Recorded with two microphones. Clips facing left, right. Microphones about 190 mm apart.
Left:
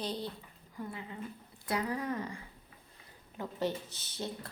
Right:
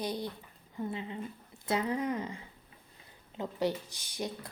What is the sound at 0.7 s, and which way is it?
Speech, 25° right (ahead or behind).